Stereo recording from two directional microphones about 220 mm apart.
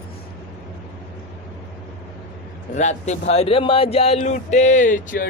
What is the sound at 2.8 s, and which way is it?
Speech, 30° left (ahead or behind).